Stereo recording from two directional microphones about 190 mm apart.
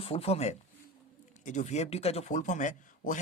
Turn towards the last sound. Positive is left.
turn(degrees=40)  # may be behind; listen again after turning